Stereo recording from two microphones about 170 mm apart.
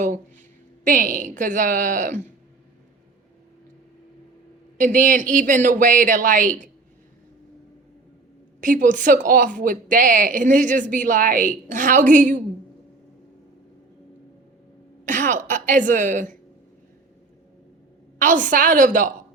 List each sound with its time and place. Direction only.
0.9 s speech: 50° right (ahead or behind)
4.8 s speech: 50° right (ahead or behind)
8.6 s speech: 50° right (ahead or behind)
15.0 s a woman's voice: 50° right (ahead or behind)
18.2 s speech: 50° right (ahead or behind)